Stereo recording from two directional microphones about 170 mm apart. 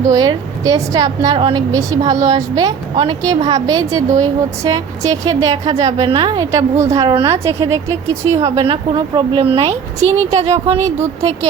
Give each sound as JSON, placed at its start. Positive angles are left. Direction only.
{"t": 0.1, "sound": "a woman's voice", "side_deg": -20}
{"t": 2.9, "sound": "a woman's voice", "side_deg": -35}
{"t": 3.2, "sound": "a woman's voice", "side_deg": -20}
{"t": 8.6, "sound": "speech", "side_deg": -30}